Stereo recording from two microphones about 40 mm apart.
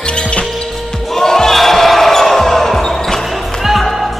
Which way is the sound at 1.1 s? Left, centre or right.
Centre.